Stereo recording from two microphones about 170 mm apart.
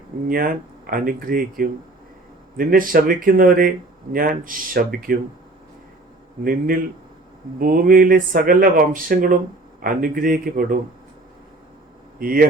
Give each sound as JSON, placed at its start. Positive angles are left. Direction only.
{"t": 0.3, "sound": "speech", "side_deg": -55}
{"t": 6.4, "sound": "speech", "side_deg": -55}
{"t": 12.2, "sound": "speech", "side_deg": -60}